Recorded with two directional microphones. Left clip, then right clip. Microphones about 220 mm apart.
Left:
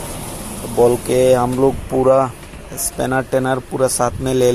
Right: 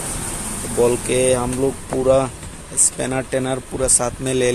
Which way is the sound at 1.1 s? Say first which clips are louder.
Left 5 dB; 15° left (ahead or behind).